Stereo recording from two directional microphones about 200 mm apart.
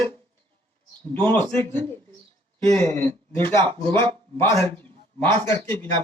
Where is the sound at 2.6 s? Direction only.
10° left (ahead or behind).